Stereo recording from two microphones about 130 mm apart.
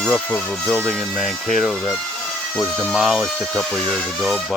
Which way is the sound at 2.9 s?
5° right (ahead or behind).